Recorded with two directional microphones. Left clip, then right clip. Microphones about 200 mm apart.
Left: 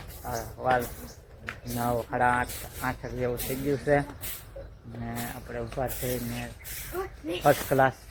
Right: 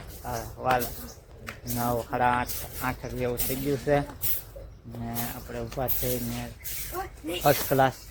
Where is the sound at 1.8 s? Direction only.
10° right (ahead or behind).